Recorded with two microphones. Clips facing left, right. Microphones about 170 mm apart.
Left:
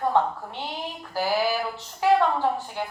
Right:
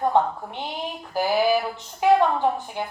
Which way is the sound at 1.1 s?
15° right (ahead or behind).